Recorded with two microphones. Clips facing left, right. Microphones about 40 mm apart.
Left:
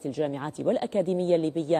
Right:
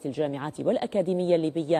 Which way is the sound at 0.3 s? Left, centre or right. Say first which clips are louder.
Even; centre.